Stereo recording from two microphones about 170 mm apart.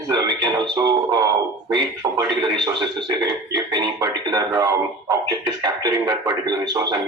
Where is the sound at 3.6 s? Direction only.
25° right (ahead or behind).